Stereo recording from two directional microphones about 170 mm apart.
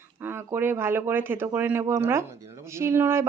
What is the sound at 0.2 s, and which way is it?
Speech, 10° right (ahead or behind).